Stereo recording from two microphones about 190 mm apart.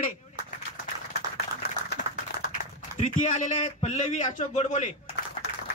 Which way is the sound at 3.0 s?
40° left (ahead or behind).